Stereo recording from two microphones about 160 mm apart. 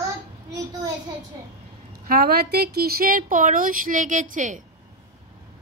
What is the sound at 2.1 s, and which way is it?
A woman's voice, 70° right (ahead or behind).